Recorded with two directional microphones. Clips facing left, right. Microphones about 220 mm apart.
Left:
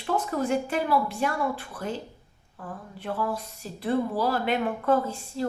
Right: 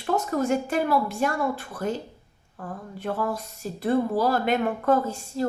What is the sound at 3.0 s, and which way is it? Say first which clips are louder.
Speech: right 2 dB; 45° right (ahead or behind).